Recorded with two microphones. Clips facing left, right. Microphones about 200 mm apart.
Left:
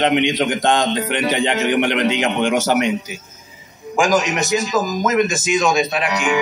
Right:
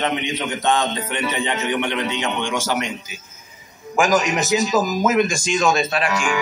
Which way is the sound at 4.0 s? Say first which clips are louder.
Left 1 dB; 5° left (ahead or behind).